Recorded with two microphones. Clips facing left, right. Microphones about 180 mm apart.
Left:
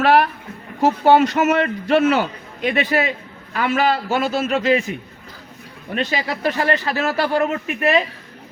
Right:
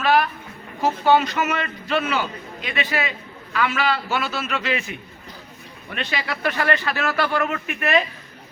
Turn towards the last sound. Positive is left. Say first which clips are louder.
# left 3 dB
turn(degrees=30)  # may be behind; listen again after turning